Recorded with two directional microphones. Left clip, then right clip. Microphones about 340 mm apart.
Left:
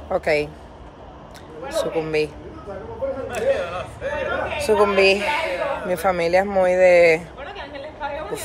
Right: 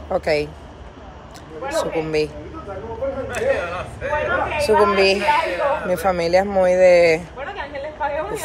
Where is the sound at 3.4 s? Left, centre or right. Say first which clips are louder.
Even; right.